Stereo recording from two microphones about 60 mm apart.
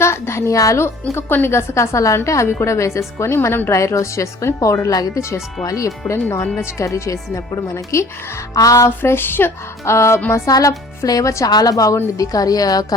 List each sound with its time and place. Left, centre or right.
0.0 s a woman's voice: left
1.1 s a woman's voice: left
3.7 s speech: left
5.6 s speech: left
6.2 s a woman's voice: left
8.5 s a woman's voice: left
9.0 s speech: left
9.8 s a woman's voice: left
10.5 s a woman's voice: left